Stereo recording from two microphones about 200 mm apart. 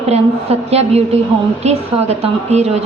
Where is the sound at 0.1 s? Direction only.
30° right (ahead or behind).